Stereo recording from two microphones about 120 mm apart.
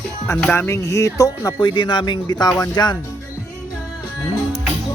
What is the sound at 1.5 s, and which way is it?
Speech, 35° left (ahead or behind).